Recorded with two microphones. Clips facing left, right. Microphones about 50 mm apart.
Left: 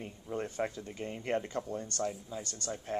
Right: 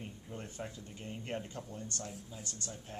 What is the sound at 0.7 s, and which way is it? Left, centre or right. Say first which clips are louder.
Speech: left 6 dB; left.